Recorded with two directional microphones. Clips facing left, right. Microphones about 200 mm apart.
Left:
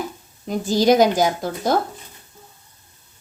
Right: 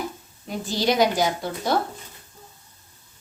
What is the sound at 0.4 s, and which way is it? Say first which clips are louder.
Speech: left 7 dB; 45° left (ahead or behind).